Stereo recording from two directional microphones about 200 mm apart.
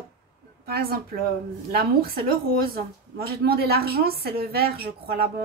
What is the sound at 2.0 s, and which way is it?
A woman's voice, 50° right (ahead or behind).